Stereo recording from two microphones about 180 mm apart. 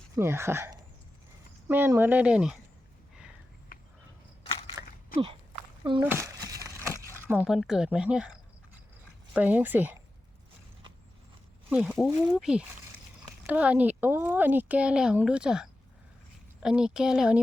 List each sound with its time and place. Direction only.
0.2 s speech: 15° right (ahead or behind)
4.8 s a sound: 15° right (ahead or behind)
6.0 s crumpling: 15° right (ahead or behind)
7.3 s speech: 5° right (ahead or behind)
11.7 s speech: centre (ahead or behind)